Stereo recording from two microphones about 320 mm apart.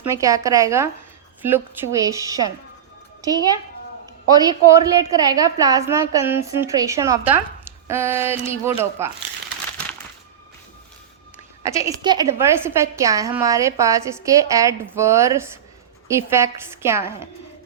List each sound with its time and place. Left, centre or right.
0.0 s a woman's voice: centre
4.3 s a woman's voice: centre
11.6 s a woman's voice: centre